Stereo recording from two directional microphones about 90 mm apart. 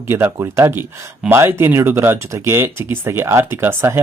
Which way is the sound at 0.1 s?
25° right (ahead or behind).